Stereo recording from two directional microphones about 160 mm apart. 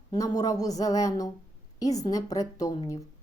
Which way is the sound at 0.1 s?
20° left (ahead or behind).